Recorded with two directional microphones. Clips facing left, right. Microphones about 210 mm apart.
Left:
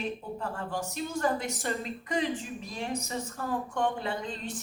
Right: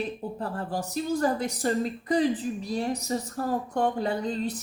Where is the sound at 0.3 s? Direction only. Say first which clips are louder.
Right 3 dB; 35° right (ahead or behind).